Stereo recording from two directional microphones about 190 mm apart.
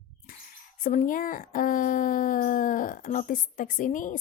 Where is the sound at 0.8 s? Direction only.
45° left (ahead or behind).